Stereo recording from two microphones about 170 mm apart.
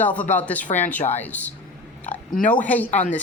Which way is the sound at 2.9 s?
45° left (ahead or behind).